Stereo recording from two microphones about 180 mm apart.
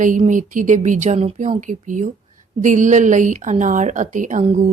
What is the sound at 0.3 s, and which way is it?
Speech, 45° right (ahead or behind).